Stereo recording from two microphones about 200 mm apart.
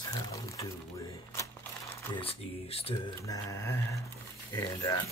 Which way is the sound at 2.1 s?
30° left (ahead or behind).